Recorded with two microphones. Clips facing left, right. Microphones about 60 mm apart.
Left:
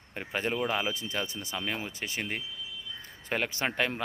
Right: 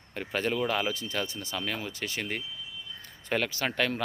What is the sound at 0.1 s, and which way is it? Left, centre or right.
Speech, centre.